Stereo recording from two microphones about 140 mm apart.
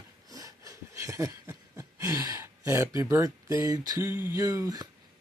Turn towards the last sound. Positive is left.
turn(degrees=-25)  # may be behind; listen again after turning